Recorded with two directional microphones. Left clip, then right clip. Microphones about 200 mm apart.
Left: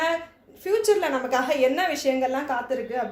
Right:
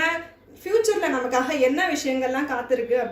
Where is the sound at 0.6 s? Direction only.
40° left (ahead or behind).